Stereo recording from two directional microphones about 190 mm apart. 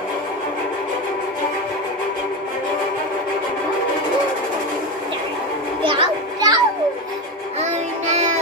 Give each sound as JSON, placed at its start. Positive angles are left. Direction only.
{"t": 5.9, "sound": "children playing", "side_deg": -25}
{"t": 7.6, "sound": "child singing", "side_deg": -35}